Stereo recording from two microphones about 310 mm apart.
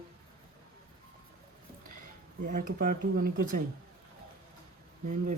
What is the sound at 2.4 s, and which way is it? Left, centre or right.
Speech, right.